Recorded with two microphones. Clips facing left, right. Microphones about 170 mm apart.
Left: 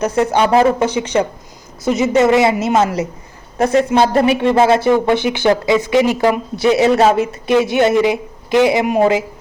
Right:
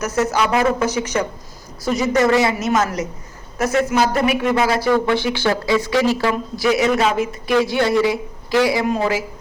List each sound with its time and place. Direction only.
0.0 s speech: 30° left (ahead or behind)
7.2 s speech: 20° left (ahead or behind)